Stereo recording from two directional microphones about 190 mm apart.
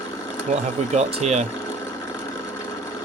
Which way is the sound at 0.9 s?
35° right (ahead or behind).